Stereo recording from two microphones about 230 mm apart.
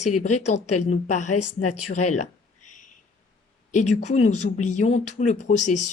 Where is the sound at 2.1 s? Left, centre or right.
Left.